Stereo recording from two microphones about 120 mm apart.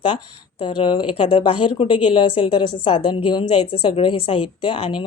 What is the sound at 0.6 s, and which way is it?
A woman's voice, 40° left (ahead or behind).